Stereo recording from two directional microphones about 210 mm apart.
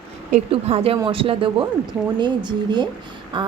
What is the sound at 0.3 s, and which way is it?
A woman's voice, 30° right (ahead or behind).